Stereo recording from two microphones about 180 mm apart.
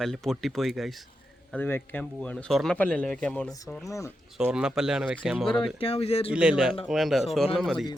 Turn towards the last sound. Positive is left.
turn(degrees=0)  # may be behind; listen again after turning